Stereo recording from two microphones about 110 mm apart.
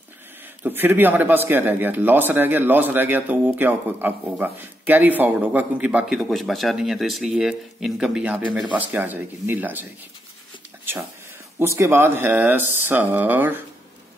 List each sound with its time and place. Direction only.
0.6 s speech: 15° right (ahead or behind)
11.6 s speech: 25° right (ahead or behind)